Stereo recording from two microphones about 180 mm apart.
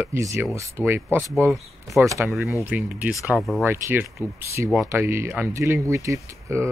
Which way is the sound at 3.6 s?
15° right (ahead or behind).